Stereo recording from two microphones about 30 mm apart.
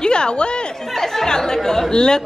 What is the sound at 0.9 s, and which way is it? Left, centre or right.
Speech, centre.